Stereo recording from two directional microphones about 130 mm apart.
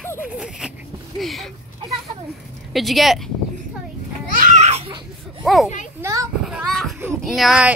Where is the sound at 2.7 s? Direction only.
Centre (ahead or behind).